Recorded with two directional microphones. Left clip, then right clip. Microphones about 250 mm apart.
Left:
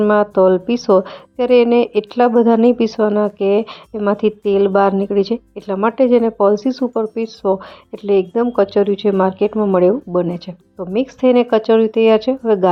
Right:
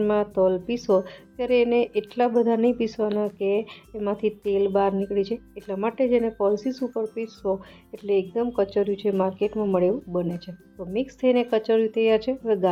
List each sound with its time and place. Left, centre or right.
0.0 s a woman's voice: left